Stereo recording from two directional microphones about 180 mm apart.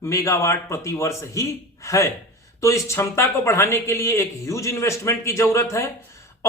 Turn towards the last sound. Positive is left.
turn(degrees=15)  # may be behind; listen again after turning